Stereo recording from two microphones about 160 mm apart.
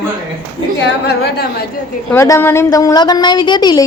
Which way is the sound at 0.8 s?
90° left.